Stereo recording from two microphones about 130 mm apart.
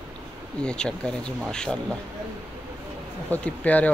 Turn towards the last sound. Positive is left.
turn(degrees=10)  # may be behind; listen again after turning